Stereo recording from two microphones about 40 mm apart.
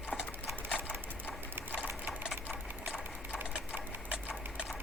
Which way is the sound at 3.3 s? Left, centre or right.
Right.